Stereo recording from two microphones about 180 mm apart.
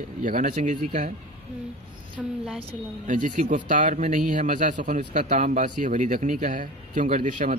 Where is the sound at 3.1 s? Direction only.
45° right (ahead or behind).